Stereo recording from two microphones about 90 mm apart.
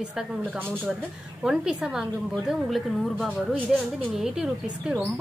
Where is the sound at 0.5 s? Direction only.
20° right (ahead or behind).